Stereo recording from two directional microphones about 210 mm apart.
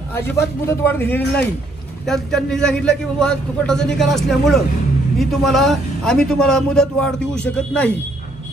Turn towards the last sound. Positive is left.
turn(degrees=5)  # may be behind; listen again after turning